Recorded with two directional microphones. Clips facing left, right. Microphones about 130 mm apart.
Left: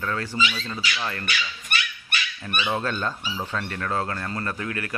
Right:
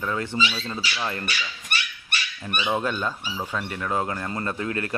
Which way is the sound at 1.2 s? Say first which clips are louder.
Left 1 dB; 35° right (ahead or behind).